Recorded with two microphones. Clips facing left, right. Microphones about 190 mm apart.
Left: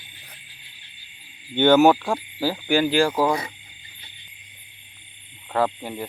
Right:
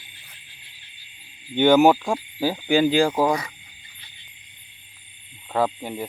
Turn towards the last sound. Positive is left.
turn(degrees=-10)  # may be behind; listen again after turning